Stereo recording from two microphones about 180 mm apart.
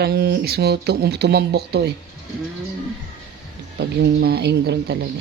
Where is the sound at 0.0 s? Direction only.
65° right (ahead or behind).